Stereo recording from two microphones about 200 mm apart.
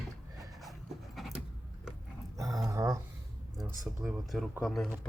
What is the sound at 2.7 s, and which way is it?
Speech, 15° right (ahead or behind).